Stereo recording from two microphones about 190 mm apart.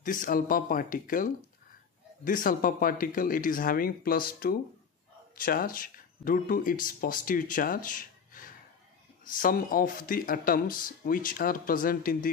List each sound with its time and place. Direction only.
0.0 s speech: 45° left (ahead or behind)